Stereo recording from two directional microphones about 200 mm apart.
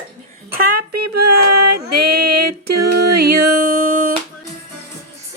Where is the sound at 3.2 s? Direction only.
40° right (ahead or behind).